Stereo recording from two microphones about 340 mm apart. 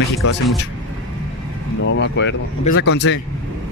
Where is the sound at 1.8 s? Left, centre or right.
Left.